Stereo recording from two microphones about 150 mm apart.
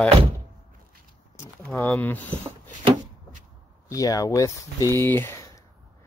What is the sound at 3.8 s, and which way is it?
Speech, 25° left (ahead or behind).